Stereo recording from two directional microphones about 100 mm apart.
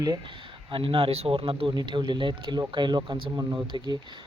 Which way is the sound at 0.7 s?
60° right (ahead or behind).